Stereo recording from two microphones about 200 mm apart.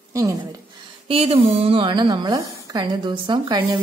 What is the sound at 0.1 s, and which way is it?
Speech, 15° right (ahead or behind).